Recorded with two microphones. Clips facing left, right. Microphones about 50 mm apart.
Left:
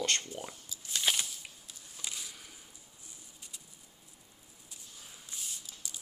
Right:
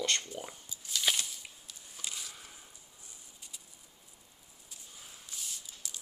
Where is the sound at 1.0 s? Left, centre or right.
Centre.